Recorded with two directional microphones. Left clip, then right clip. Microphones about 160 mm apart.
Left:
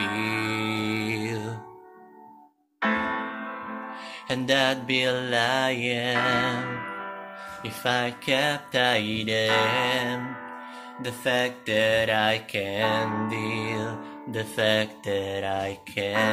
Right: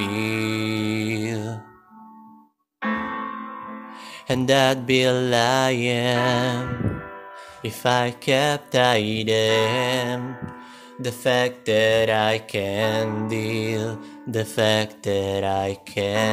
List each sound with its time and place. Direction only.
0.0 s music: 55° right (ahead or behind)
3.0 s music: 5° left (ahead or behind)
4.3 s mantra: 55° right (ahead or behind)
7.6 s mantra: 55° right (ahead or behind)